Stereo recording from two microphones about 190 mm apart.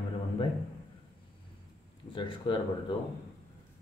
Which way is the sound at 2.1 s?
25° left (ahead or behind).